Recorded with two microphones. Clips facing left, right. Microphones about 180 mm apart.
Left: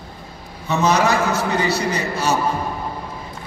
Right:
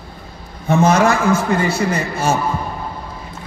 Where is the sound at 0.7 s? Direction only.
50° right (ahead or behind).